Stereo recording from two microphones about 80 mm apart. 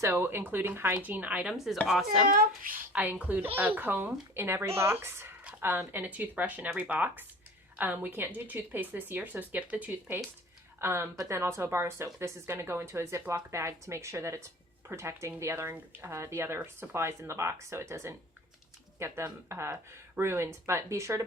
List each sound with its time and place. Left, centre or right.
0.0 s speech: right
1.5 s speech: centre
2.9 s a woman's voice: right